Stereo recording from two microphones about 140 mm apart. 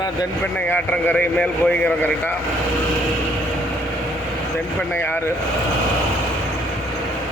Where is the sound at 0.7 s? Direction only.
15° left (ahead or behind).